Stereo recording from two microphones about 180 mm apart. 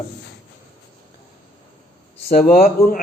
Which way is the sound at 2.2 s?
55° left (ahead or behind).